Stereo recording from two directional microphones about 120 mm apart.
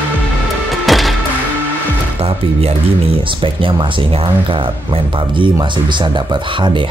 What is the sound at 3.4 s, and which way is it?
Speech, 45° right (ahead or behind).